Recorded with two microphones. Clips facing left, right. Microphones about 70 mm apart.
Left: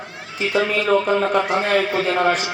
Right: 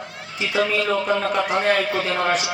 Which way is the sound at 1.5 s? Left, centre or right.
Left.